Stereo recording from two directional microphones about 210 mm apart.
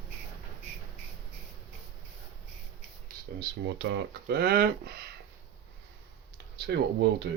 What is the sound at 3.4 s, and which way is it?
Speech, 55° right (ahead or behind).